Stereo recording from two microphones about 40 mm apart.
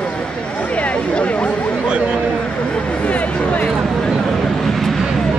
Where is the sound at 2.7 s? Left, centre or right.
Left.